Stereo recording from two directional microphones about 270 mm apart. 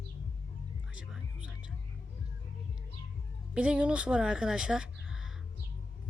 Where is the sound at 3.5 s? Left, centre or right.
Centre.